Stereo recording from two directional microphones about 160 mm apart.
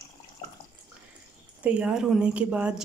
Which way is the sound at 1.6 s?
5° right (ahead or behind).